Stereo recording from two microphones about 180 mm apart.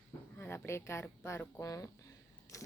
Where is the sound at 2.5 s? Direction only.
15° left (ahead or behind).